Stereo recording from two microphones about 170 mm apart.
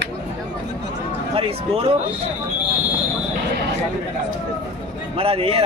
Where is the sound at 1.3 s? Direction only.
35° right (ahead or behind).